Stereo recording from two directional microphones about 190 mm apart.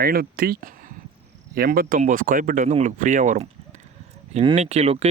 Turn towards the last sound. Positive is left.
turn(degrees=-35)  # may be behind; listen again after turning